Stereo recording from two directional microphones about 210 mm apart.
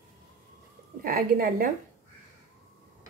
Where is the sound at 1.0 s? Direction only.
45° right (ahead or behind).